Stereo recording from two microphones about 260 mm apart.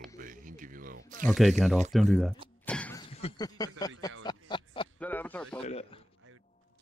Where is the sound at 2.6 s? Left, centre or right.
Centre.